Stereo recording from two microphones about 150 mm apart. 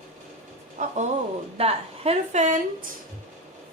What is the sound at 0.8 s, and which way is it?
Speech, 55° right (ahead or behind).